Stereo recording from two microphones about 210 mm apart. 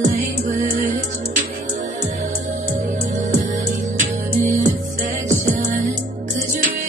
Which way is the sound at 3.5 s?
40° right (ahead or behind).